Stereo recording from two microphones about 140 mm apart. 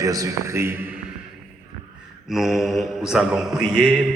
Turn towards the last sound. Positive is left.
turn(degrees=-5)  # may be behind; listen again after turning